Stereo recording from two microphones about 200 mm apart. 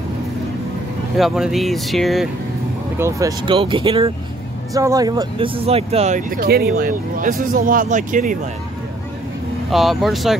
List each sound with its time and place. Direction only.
1.1 s speech: centre (ahead or behind)
3.0 s speech: 15° right (ahead or behind); by 8.4 s 40° right (ahead or behind)
9.7 s speech: centre (ahead or behind)